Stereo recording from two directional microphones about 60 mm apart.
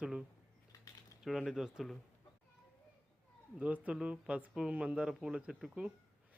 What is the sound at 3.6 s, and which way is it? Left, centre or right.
A man's voice, right.